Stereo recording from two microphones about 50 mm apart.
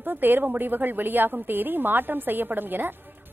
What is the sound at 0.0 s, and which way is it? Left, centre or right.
A woman's voice, right.